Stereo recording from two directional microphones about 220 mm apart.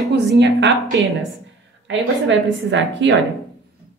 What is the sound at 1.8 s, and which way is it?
A woman's voice, 55° right (ahead or behind).